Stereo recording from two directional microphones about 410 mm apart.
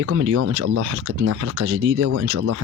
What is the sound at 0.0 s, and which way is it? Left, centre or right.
Speech, right.